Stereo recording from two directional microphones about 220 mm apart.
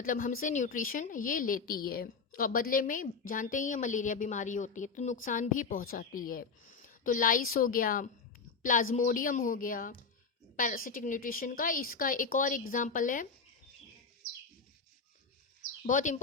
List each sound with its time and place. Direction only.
0.0 s a woman's voice: 40° left (ahead or behind)
15.8 s a woman's voice: 35° left (ahead or behind)